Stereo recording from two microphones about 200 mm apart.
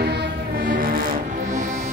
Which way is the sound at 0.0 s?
55° right (ahead or behind).